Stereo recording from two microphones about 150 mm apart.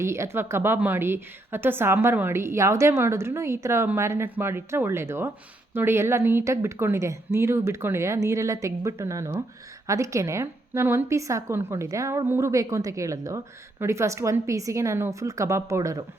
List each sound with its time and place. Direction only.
0.0 s a woman's voice: 20° right (ahead or behind)